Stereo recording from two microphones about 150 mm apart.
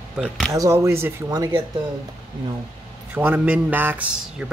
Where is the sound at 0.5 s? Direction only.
20° right (ahead or behind).